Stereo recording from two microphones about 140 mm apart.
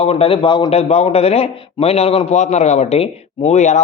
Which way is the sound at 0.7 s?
50° left (ahead or behind).